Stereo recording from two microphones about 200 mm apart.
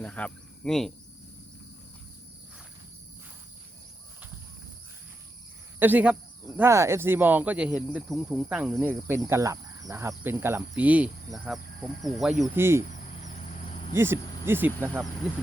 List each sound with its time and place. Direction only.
0.0 s cricket: 5° left (ahead or behind)
5.8 s speech: 10° right (ahead or behind)
7.9 s cricket: 5° right (ahead or behind)
8.9 s speech: 10° right (ahead or behind)
11.4 s cricket: centre (ahead or behind)
12.5 s speech: 10° right (ahead or behind)
12.9 s cricket: 35° left (ahead or behind)
13.9 s speech: 10° right (ahead or behind)